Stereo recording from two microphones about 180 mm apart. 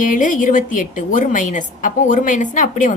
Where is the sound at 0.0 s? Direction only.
45° left (ahead or behind).